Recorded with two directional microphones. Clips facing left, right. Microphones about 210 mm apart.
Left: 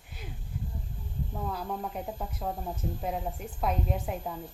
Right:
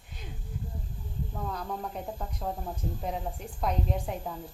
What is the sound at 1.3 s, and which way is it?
Speech, 5° left (ahead or behind).